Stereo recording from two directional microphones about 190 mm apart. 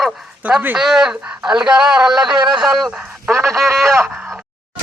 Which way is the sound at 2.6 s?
Centre (ahead or behind).